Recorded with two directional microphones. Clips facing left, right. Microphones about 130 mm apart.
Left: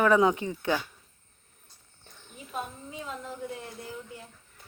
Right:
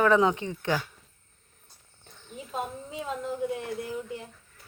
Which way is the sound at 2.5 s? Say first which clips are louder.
Right 3 dB; 20° right (ahead or behind).